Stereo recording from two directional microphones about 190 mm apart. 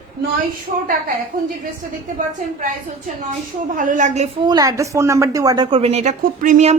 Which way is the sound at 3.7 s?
45° right (ahead or behind).